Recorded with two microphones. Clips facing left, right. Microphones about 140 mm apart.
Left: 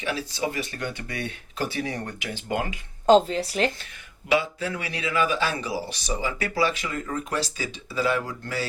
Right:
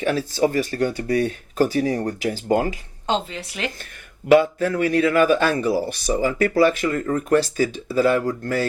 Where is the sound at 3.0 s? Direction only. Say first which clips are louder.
Left 7 dB; 40° left (ahead or behind).